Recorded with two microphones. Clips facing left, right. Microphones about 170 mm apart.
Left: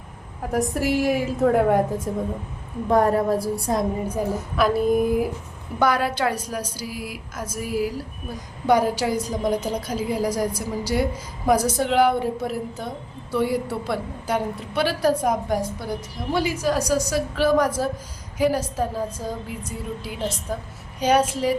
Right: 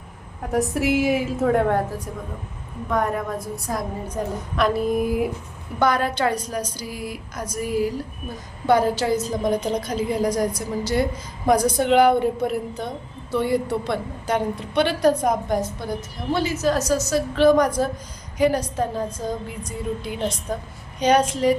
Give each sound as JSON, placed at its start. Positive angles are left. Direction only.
{"t": 0.5, "sound": "a woman's voice", "side_deg": 0}
{"t": 2.1, "sound": "a woman's voice", "side_deg": 30}
{"t": 4.1, "sound": "a woman's voice", "side_deg": 5}